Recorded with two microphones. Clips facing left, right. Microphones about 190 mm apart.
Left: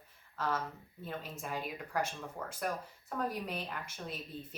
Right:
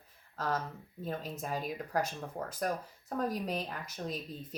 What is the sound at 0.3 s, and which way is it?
Speech, 40° right (ahead or behind).